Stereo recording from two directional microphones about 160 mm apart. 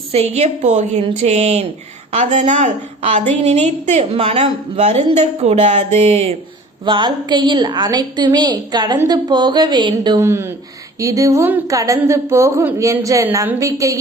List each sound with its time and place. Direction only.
0.1 s a woman's voice: 40° right (ahead or behind)
6.8 s a woman's voice: 30° right (ahead or behind)